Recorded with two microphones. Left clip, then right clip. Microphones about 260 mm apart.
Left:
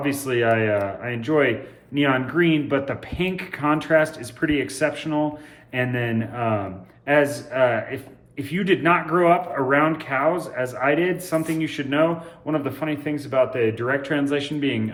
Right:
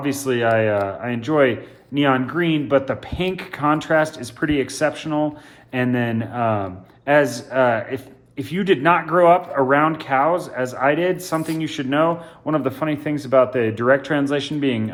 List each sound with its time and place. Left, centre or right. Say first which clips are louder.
0.0 s speech: right 2 dB; centre